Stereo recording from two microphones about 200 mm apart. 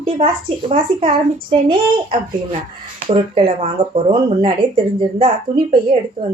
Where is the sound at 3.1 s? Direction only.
30° right (ahead or behind).